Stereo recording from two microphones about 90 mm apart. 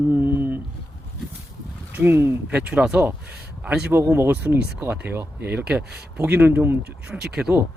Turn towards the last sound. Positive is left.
turn(degrees=-5)  # may be behind; listen again after turning